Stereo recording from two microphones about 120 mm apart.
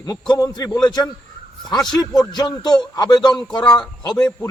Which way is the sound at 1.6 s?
5° left (ahead or behind).